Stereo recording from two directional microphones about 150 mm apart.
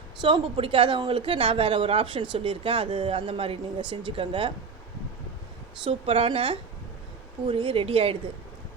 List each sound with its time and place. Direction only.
0.2 s speech: 30° right (ahead or behind)
5.8 s speech: 35° right (ahead or behind)